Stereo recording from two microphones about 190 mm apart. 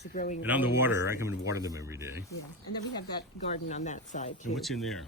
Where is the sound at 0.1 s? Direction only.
40° left (ahead or behind).